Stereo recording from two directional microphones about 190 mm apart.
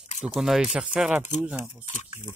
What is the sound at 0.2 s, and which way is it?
Speech, centre (ahead or behind).